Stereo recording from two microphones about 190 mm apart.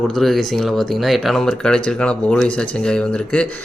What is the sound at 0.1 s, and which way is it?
A man's voice, centre (ahead or behind).